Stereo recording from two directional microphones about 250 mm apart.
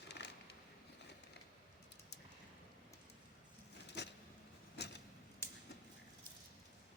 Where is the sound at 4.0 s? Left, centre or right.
Left.